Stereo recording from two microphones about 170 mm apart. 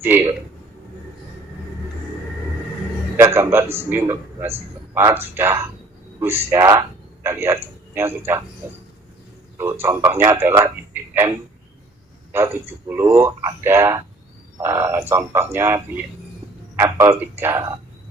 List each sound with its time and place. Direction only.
0.0 s speech: 15° right (ahead or behind)
3.2 s speech: 15° right (ahead or behind)
9.8 s a man's voice: 15° right (ahead or behind)